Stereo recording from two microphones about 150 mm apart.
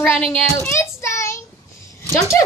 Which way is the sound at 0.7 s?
20° left (ahead or behind).